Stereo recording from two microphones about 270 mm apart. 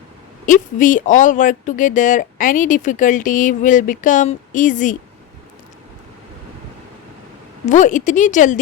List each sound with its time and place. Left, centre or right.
0.4 s speech: left
7.6 s speech: left